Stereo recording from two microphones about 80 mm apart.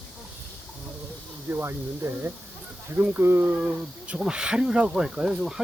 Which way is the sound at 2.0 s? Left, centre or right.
Right.